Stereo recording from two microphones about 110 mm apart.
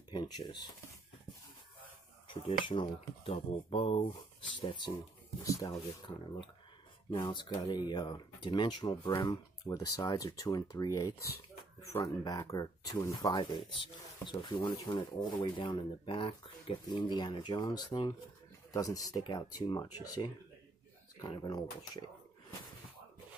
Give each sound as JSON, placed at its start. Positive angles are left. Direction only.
{"t": 0.1, "sound": "speech", "side_deg": 45}
{"t": 2.2, "sound": "speech", "side_deg": 55}
{"t": 4.1, "sound": "speech", "side_deg": 45}
{"t": 5.4, "sound": "speech", "side_deg": 30}
{"t": 7.1, "sound": "speech", "side_deg": 40}
{"t": 16.8, "sound": "speech", "side_deg": 40}